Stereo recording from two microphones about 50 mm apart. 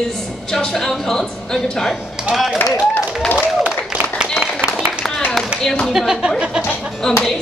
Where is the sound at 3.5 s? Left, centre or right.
Right.